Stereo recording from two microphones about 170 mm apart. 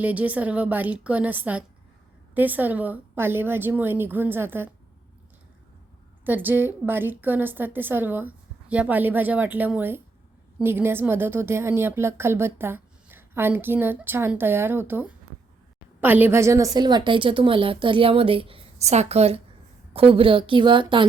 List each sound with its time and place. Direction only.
0.0 s a woman's voice: 10° right (ahead or behind)
6.2 s a woman's voice: 10° right (ahead or behind); by 21.1 s 30° right (ahead or behind)